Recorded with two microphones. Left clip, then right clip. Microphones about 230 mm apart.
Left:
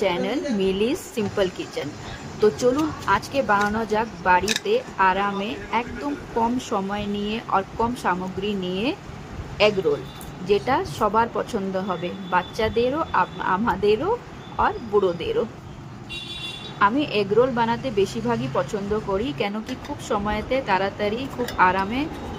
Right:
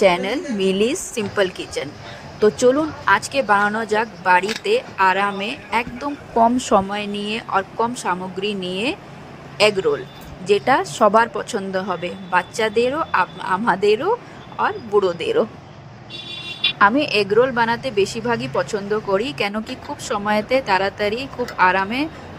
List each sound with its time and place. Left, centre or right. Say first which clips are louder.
0.0 s speech: right 6 dB; right
16.7 s speech: right 4 dB; right